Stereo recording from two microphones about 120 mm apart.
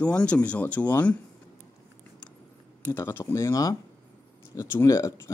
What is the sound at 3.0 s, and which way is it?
Speech, 20° left (ahead or behind).